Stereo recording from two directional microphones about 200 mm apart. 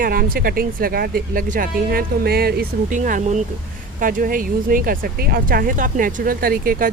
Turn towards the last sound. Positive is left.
turn(degrees=-45)  # may be behind; listen again after turning